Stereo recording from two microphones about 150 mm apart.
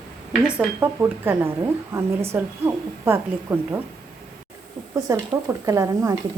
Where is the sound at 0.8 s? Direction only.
15° right (ahead or behind).